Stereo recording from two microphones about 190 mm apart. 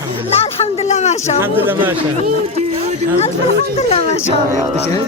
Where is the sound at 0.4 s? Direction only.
35° left (ahead or behind).